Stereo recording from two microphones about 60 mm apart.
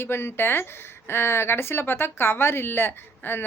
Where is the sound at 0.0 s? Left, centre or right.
Left.